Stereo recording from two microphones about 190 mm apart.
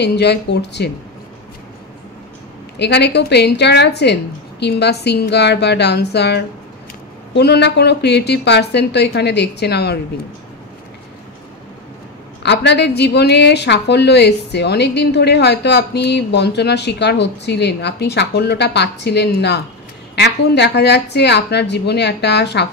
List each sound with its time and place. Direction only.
0.0 s a woman's voice: 60° left (ahead or behind)
2.8 s a woman's voice: 60° left (ahead or behind)
12.4 s a woman's voice: 60° left (ahead or behind)